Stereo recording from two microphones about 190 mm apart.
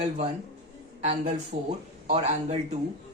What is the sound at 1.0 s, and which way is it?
Speech, 35° right (ahead or behind).